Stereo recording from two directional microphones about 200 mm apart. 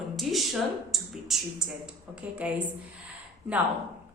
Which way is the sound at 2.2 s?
10° right (ahead or behind).